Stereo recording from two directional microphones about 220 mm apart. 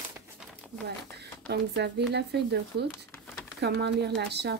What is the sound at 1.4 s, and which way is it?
Speech, 50° right (ahead or behind).